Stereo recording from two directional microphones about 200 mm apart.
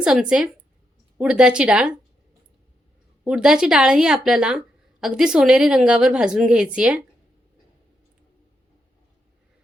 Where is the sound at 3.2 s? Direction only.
5° right (ahead or behind).